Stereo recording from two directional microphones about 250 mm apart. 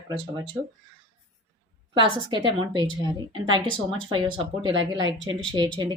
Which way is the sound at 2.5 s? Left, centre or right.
Centre.